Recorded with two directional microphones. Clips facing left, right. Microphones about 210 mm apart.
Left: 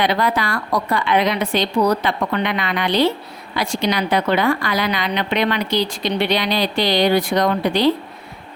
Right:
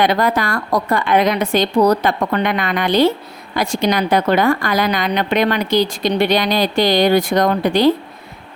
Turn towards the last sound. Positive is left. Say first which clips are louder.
# right 3 dB
turn(degrees=-45)  # may be behind; listen again after turning